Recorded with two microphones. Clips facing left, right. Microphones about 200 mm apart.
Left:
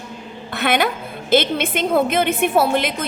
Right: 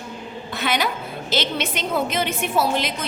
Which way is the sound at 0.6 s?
55° left (ahead or behind).